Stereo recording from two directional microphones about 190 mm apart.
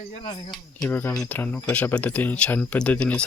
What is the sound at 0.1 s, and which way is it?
Speech, 30° left (ahead or behind).